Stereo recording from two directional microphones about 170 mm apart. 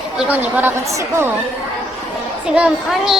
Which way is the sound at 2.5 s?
5° right (ahead or behind).